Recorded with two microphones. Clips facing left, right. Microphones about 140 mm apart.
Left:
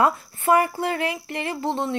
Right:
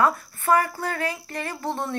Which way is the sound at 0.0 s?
20° left (ahead or behind).